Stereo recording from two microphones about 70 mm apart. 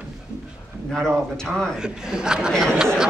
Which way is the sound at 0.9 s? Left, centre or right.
Centre.